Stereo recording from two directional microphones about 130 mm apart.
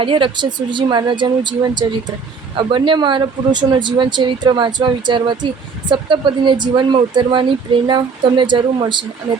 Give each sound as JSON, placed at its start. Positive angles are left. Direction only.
{"t": 0.0, "sound": "speech", "side_deg": -40}